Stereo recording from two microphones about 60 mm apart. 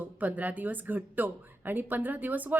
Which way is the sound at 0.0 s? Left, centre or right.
Right.